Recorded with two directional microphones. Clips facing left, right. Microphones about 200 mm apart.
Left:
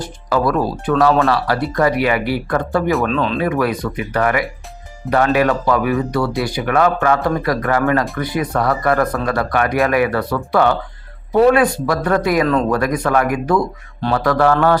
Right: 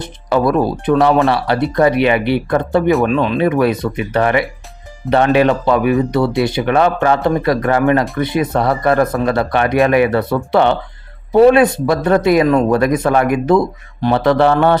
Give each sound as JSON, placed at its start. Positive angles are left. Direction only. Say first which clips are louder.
{"t": 0.0, "sound": "speech", "louder": "right 3 dB", "side_deg": -25}
{"t": 3.4, "sound": "speech", "louder": "right 4 dB", "side_deg": -25}
{"t": 12.5, "sound": "speech", "louder": "right 4 dB", "side_deg": -15}
{"t": 12.7, "sound": "speech", "louder": "right 3 dB", "side_deg": -25}